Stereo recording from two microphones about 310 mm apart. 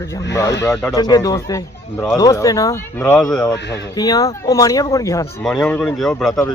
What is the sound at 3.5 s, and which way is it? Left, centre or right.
Speech, left.